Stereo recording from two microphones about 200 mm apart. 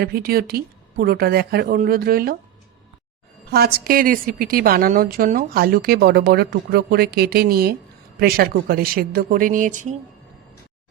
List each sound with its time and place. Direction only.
0.0 s a woman's voice: 50° right (ahead or behind)
3.5 s a woman's voice: 50° right (ahead or behind)